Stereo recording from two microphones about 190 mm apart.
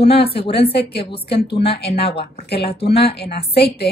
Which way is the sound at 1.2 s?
60° left (ahead or behind).